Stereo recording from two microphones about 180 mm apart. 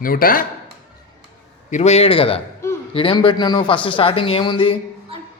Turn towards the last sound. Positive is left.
turn(degrees=30)  # may be behind; listen again after turning